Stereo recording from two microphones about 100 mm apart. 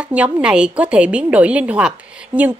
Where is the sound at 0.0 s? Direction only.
10° right (ahead or behind).